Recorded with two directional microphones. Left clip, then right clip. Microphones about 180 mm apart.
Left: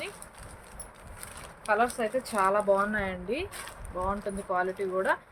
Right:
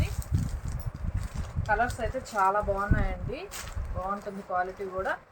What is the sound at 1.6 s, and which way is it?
Speech, 65° left (ahead or behind).